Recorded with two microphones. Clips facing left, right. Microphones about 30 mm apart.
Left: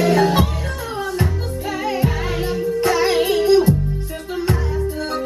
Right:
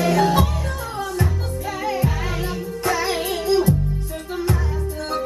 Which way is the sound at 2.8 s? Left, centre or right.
Left.